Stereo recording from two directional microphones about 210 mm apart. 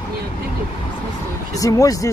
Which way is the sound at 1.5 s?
15° left (ahead or behind).